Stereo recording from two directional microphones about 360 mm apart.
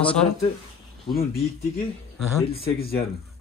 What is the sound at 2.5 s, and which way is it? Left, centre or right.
Speech, centre.